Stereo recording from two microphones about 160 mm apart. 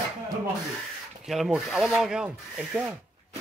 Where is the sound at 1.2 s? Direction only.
Centre (ahead or behind).